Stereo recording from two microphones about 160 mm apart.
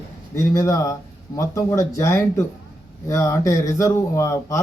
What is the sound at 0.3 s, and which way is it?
Speech, 20° left (ahead or behind).